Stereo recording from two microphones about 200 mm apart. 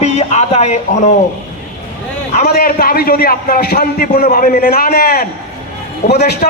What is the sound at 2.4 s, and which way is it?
A man's voice, 45° left (ahead or behind).